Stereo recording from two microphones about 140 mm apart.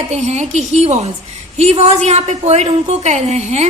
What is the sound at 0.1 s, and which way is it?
A woman's voice, 55° right (ahead or behind).